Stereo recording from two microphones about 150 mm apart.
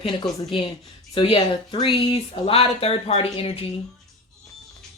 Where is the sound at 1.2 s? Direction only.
35° left (ahead or behind).